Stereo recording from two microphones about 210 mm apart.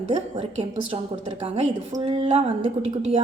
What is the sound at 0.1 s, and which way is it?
A woman's voice, 25° right (ahead or behind).